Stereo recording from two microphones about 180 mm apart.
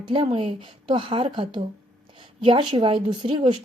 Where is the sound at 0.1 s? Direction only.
30° right (ahead or behind).